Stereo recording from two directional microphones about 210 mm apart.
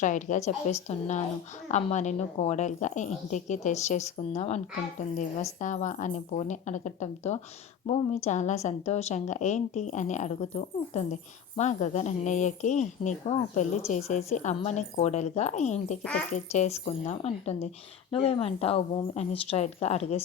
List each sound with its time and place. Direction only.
0.0 s a woman's voice: 35° left (ahead or behind)